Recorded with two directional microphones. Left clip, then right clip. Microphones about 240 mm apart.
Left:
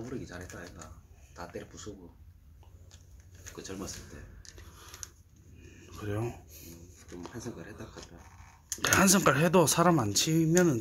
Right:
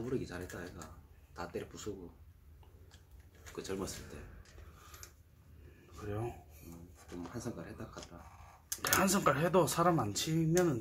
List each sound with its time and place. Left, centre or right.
0.1 s speech: centre
3.5 s speech: right
5.9 s speech: left
7.2 s speech: centre
8.8 s speech: left